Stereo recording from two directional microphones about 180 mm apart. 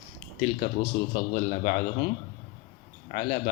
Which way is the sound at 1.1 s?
40° left (ahead or behind).